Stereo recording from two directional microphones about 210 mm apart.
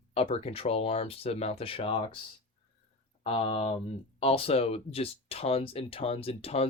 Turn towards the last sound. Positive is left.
turn(degrees=30)  # may be behind; listen again after turning